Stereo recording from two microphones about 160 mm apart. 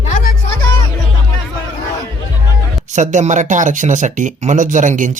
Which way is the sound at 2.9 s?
50° right (ahead or behind).